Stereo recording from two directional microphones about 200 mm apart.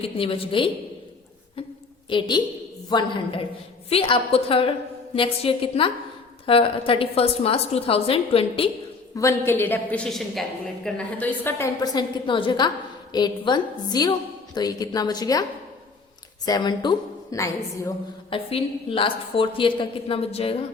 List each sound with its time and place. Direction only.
0.0 s a woman's voice: 30° left (ahead or behind)
2.0 s a woman's voice: 25° left (ahead or behind)
9.1 s a man's voice: 15° left (ahead or behind)
16.5 s a woman's voice: 20° left (ahead or behind)
18.3 s a woman's voice: 25° left (ahead or behind)